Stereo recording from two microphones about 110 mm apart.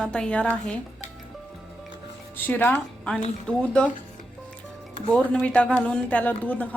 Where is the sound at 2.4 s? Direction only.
20° left (ahead or behind).